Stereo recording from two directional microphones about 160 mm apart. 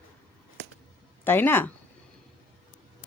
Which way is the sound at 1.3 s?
15° left (ahead or behind).